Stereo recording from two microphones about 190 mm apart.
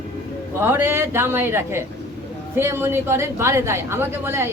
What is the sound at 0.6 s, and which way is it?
A woman's voice, 10° right (ahead or behind).